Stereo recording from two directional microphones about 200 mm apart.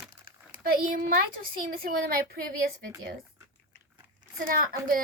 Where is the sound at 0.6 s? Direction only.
45° right (ahead or behind).